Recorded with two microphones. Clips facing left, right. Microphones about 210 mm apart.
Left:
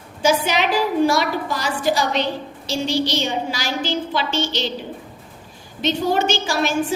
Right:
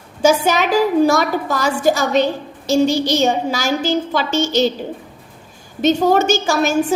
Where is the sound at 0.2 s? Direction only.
45° right (ahead or behind).